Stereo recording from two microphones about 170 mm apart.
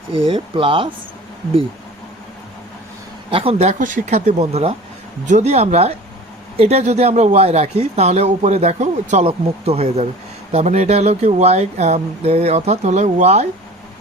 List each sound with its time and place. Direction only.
0.1 s speech: 30° right (ahead or behind)
3.2 s speech: 35° right (ahead or behind)